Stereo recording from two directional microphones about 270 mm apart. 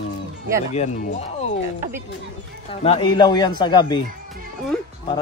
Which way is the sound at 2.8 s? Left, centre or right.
Left.